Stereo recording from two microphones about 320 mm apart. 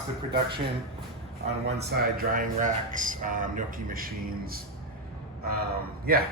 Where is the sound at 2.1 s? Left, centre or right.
Right.